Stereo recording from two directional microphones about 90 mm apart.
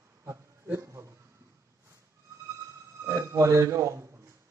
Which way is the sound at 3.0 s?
35° right (ahead or behind).